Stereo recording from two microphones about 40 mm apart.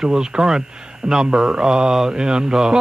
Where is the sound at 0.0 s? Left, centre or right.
Centre.